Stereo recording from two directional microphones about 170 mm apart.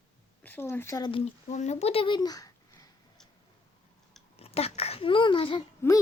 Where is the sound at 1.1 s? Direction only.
40° left (ahead or behind); by 2.9 s 20° left (ahead or behind).